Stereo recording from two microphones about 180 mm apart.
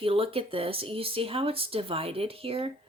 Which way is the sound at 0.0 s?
30° right (ahead or behind).